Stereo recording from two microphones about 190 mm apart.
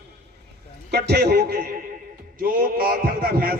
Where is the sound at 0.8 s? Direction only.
60° right (ahead or behind).